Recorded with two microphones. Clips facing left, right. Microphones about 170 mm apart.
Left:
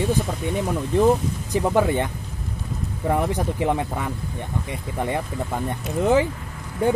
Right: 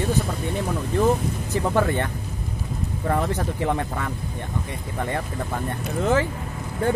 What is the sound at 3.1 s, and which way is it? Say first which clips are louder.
Speech: left 2 dB; 15° left (ahead or behind).